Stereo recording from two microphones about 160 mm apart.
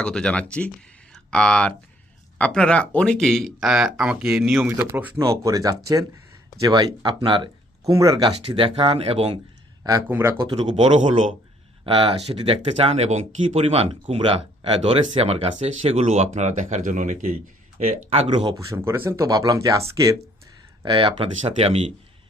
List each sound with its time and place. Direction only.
0.0 s speech: 5° left (ahead or behind)
1.1 s a sound: 5° left (ahead or behind)
2.4 s speech: 5° left (ahead or behind); by 8.3 s 20° right (ahead or behind)
8.3 s speech: 35° right (ahead or behind)
10.1 s speech: 15° right (ahead or behind)
10.8 s speech: 45° right (ahead or behind)
11.9 s speech: 35° right (ahead or behind)
18.6 s speech: 15° right (ahead or behind)
20.8 s speech: 30° right (ahead or behind)